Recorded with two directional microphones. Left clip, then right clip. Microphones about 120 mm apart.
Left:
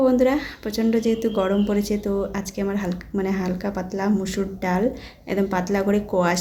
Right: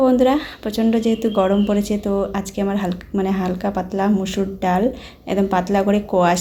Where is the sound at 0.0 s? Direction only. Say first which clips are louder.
Right 3 dB; 15° right (ahead or behind).